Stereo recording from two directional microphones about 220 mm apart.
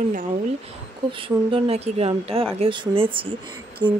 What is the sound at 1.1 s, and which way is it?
Speech, 25° right (ahead or behind).